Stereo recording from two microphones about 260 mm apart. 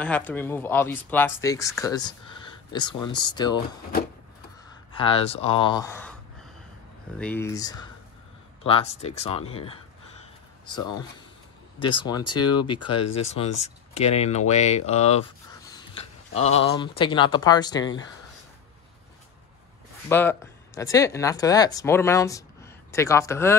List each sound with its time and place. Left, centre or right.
0.0 s speech: centre
4.9 s speech: left
7.2 s speech: centre; by 15.2 s left
15.6 s a sound: centre
16.6 s speech: centre
20.1 s speech: centre